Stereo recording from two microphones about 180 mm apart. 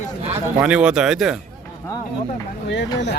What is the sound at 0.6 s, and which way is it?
Speech, 5° right (ahead or behind).